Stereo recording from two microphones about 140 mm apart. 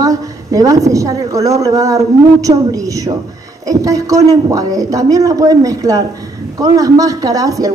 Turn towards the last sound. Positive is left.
turn(degrees=-25)  # may be behind; listen again after turning